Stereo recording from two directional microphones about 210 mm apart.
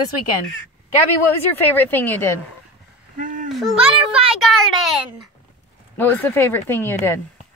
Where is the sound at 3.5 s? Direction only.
Centre (ahead or behind).